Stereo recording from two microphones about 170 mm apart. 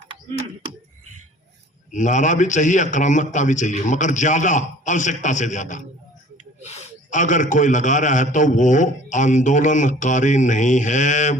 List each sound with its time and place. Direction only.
1.9 s a man's voice: 45° left (ahead or behind)